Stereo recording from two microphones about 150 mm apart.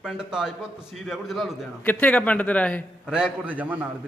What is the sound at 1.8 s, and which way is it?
A man's voice, 10° left (ahead or behind).